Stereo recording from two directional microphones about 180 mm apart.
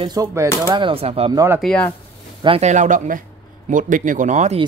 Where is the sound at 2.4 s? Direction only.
35° right (ahead or behind).